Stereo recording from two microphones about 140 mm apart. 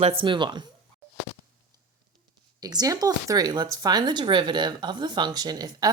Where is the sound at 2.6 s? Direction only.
25° right (ahead or behind).